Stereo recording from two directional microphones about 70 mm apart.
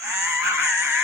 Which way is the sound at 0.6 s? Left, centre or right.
Right.